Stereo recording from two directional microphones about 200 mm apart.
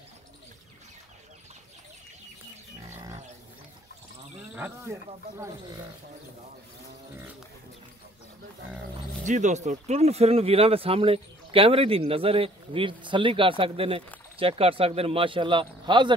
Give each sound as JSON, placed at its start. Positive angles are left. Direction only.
{"t": 2.9, "sound": "livestock", "side_deg": -15}
{"t": 4.6, "sound": "speech", "side_deg": -10}
{"t": 9.2, "sound": "speech", "side_deg": -35}